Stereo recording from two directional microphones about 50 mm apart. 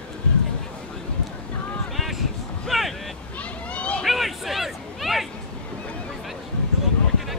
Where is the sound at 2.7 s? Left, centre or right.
Centre.